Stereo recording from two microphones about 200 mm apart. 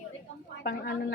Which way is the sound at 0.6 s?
55° left (ahead or behind).